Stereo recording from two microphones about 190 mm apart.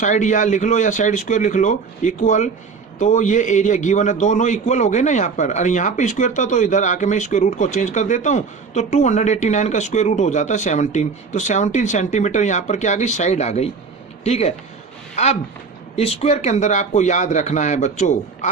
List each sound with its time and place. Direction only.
0.0 s a man's voice: 40° left (ahead or behind)